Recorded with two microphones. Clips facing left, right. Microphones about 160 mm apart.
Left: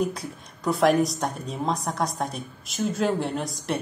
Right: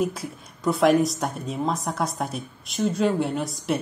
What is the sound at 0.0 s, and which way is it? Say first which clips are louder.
A woman's voice: right 1 dB; centre (ahead or behind).